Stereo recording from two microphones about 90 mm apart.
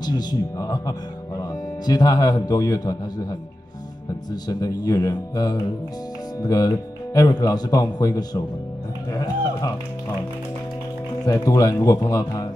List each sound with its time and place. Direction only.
0.0 s speech: 50° left (ahead or behind)
11.2 s speech: 40° left (ahead or behind)